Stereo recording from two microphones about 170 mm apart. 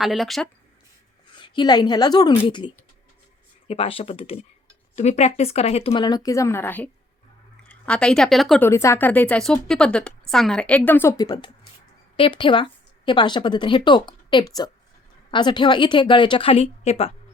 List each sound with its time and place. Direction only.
0.0 s speech: centre (ahead or behind)
1.3 s a woman's voice: 25° left (ahead or behind); by 8.6 s centre (ahead or behind)
8.6 s a woman's voice: 15° left (ahead or behind)
11.2 s a woman's voice: 25° left (ahead or behind)